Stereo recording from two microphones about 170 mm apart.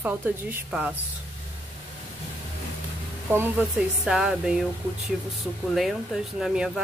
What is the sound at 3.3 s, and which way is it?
Speech, 10° right (ahead or behind).